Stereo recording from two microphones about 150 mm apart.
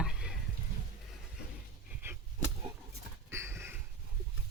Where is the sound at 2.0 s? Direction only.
15° right (ahead or behind).